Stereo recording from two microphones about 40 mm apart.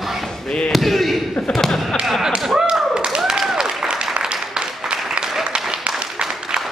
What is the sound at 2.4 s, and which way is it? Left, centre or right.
Thump, centre.